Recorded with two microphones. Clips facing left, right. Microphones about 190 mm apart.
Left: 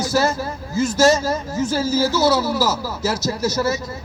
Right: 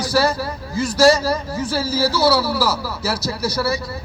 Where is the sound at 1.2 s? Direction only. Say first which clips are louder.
Right 1 dB; 25° left (ahead or behind).